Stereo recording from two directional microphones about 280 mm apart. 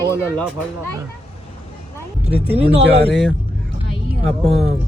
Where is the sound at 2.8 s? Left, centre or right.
Right.